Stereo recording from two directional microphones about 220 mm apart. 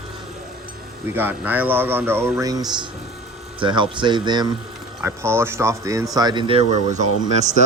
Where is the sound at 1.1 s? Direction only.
10° right (ahead or behind).